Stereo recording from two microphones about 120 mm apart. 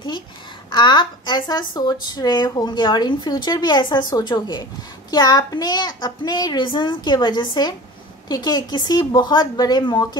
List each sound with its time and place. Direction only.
0.7 s speech: 40° left (ahead or behind)